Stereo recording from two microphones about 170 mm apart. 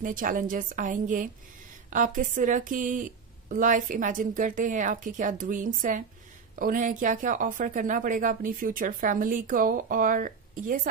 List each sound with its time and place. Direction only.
0.0 s speech: 50° right (ahead or behind)